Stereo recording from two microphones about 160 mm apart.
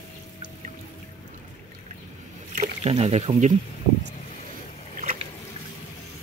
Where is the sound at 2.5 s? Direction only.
45° right (ahead or behind).